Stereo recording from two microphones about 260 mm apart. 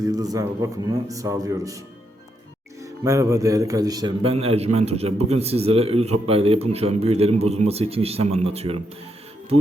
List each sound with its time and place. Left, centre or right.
0.1 s speech: centre
2.8 s a man's voice: centre